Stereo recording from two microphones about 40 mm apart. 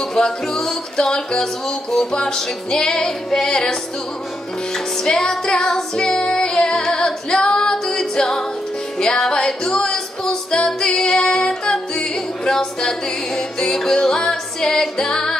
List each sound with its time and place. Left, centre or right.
0.1 s music: centre
1.4 s music: centre
4.7 s music: centre